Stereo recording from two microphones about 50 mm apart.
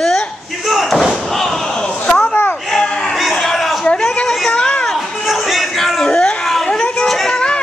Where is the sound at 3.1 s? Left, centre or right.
Centre.